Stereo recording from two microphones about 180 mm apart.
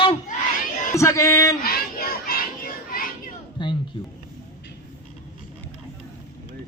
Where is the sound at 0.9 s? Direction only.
15° left (ahead or behind).